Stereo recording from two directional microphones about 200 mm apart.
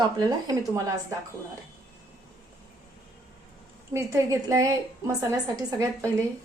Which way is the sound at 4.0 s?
15° right (ahead or behind).